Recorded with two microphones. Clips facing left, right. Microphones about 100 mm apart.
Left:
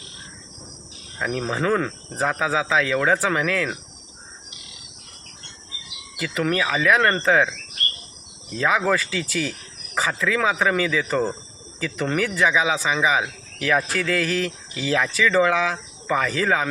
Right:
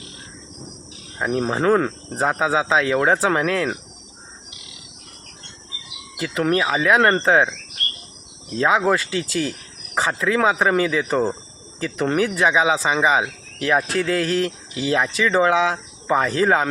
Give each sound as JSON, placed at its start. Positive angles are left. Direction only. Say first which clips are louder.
{"t": 1.2, "sound": "speech", "louder": "right 4 dB", "side_deg": -30}
{"t": 6.1, "sound": "speech", "louder": "right 3 dB", "side_deg": -30}
{"t": 8.6, "sound": "speech", "louder": "right 3 dB", "side_deg": -25}